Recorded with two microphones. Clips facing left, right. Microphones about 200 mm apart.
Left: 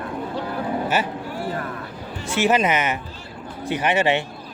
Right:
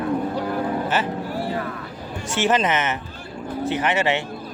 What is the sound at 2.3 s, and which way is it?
Speech, 10° left (ahead or behind).